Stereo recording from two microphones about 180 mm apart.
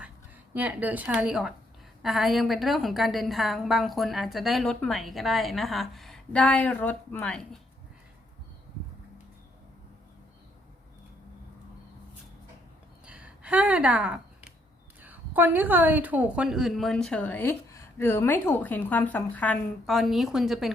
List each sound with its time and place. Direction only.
0.5 s a woman's voice: 10° right (ahead or behind)
13.1 s a sound: 5° right (ahead or behind)
15.0 s a woman's voice: 10° right (ahead or behind)